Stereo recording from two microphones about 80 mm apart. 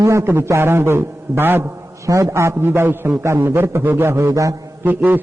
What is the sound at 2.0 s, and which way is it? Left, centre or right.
A man's voice, right.